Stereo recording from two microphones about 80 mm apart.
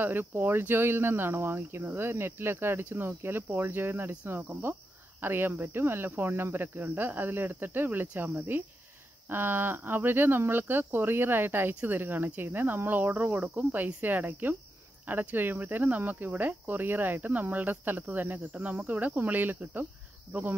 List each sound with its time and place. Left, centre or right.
0.0 s speech: right